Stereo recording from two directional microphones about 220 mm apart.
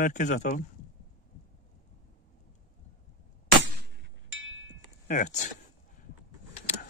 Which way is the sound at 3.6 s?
60° right (ahead or behind).